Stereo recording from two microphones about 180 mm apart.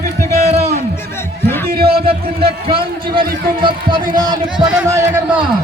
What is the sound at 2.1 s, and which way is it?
A man's voice, 30° right (ahead or behind).